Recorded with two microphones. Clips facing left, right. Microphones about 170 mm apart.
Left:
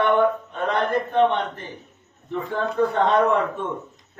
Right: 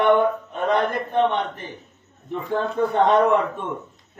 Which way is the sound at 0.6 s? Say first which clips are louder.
Right 1 dB; 15° right (ahead or behind).